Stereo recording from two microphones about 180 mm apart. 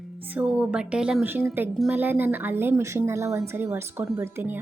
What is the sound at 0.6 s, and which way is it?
Speech, 5° right (ahead or behind).